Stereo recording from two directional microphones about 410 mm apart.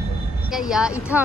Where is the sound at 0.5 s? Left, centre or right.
Centre.